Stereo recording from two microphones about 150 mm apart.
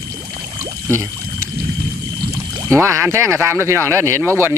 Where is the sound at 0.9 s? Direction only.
20° right (ahead or behind).